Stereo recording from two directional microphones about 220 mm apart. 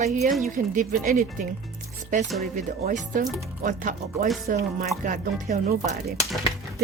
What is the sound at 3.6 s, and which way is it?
Speech, 35° right (ahead or behind).